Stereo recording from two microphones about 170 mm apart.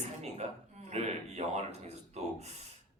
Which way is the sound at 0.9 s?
40° right (ahead or behind).